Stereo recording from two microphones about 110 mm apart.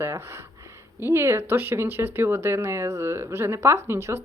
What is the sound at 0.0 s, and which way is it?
Speech, 25° right (ahead or behind).